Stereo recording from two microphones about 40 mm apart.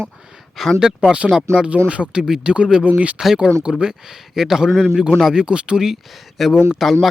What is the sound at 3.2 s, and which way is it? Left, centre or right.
Speech, centre.